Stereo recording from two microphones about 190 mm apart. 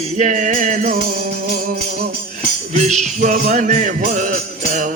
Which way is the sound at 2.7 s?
40° right (ahead or behind).